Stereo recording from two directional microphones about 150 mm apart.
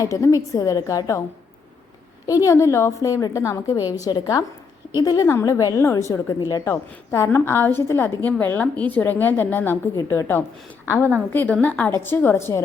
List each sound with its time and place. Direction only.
0.0 s a woman's voice: 20° left (ahead or behind)
2.2 s a woman's voice: 20° left (ahead or behind)